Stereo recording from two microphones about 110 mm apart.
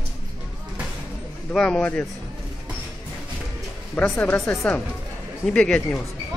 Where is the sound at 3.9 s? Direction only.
15° left (ahead or behind).